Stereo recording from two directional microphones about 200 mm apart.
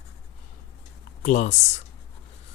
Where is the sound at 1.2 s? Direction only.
40° left (ahead or behind).